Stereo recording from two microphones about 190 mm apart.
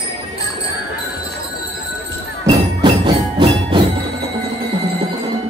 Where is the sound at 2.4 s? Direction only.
25° right (ahead or behind).